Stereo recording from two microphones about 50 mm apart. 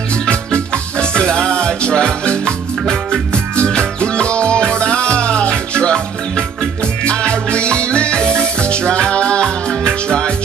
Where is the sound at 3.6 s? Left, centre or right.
Centre.